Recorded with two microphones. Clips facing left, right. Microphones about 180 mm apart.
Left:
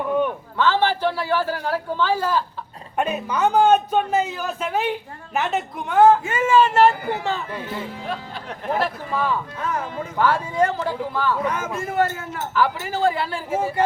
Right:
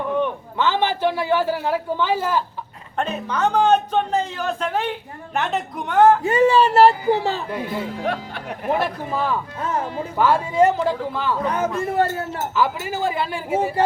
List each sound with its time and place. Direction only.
0.5 s a man's voice: 15° right (ahead or behind)
3.0 s a man's voice: 10° left (ahead or behind)
6.2 s speech: 35° right (ahead or behind)
7.5 s a man's voice: 15° right (ahead or behind)
8.0 s speech: 65° right (ahead or behind)
8.4 s a man's voice: 15° right (ahead or behind)
11.4 s speech: 35° right (ahead or behind)
12.5 s a man's voice: 15° right (ahead or behind)